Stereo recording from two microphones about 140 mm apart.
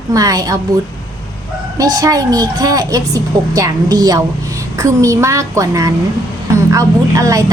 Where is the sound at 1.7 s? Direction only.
25° right (ahead or behind).